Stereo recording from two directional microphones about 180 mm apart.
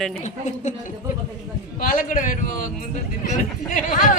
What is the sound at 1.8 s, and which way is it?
A man's voice, 50° left (ahead or behind).